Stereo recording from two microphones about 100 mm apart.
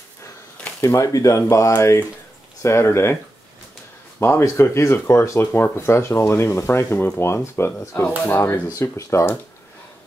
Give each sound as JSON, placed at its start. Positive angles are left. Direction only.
{"t": 0.7, "sound": "speech", "side_deg": 35}
{"t": 4.2, "sound": "speech", "side_deg": 25}